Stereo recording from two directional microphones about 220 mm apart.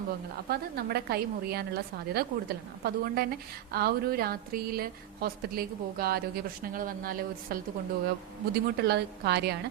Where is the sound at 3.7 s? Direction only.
45° right (ahead or behind).